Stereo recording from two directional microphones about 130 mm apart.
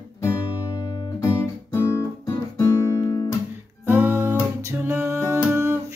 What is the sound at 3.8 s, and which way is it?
Music, 15° right (ahead or behind).